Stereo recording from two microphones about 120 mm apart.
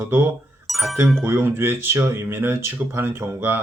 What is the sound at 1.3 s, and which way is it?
Speech, 20° right (ahead or behind).